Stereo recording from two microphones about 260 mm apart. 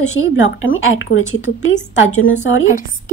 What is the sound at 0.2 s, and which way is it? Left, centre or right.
Speech, left.